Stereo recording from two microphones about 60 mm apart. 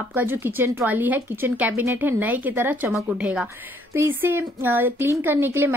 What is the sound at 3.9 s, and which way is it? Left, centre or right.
A woman's voice, right.